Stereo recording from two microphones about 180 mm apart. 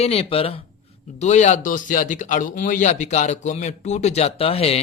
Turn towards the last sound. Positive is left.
turn(degrees=35)  # may be behind; listen again after turning